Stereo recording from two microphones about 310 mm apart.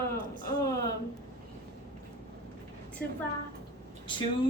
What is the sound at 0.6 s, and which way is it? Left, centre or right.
Speech, centre.